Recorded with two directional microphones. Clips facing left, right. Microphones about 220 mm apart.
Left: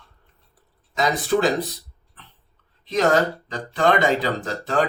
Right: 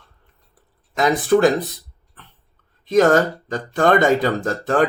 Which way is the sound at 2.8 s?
50° right (ahead or behind).